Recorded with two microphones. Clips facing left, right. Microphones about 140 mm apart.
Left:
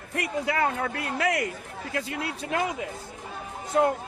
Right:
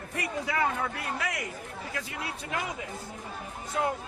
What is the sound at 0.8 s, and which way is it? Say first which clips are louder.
Speech: left 4 dB; 65° left (ahead or behind).